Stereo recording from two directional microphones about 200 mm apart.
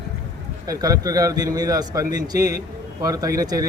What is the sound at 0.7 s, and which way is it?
A man's voice, 15° right (ahead or behind).